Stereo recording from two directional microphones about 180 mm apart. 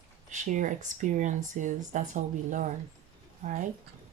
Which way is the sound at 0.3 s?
45° right (ahead or behind).